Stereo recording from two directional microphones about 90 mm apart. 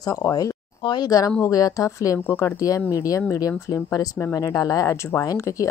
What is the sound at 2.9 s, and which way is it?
Speech, 40° left (ahead or behind).